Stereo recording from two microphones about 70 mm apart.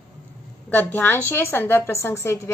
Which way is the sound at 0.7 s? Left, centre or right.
Left.